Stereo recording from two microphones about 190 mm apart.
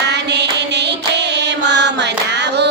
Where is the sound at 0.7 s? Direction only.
65° right (ahead or behind).